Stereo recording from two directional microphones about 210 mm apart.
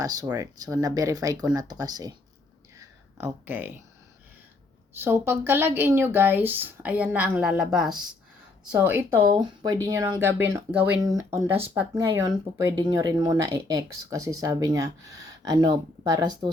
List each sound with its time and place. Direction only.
0.0 s speech: 15° right (ahead or behind)
2.7 s a sound: 15° right (ahead or behind)
4.9 s speech: 10° right (ahead or behind)